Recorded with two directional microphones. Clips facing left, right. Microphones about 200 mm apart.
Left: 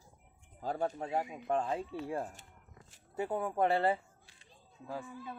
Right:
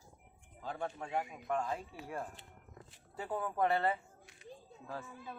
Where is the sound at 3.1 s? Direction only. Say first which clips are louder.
Left 4 dB; 25° left (ahead or behind).